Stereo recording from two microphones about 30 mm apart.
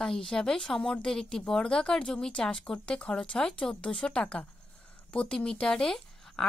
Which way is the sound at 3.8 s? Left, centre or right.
Left.